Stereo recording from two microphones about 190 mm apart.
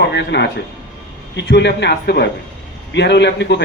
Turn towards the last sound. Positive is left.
turn(degrees=65)  # may be behind; listen again after turning